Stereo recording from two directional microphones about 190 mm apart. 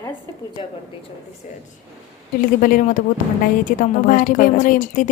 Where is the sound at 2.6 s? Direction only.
45° left (ahead or behind).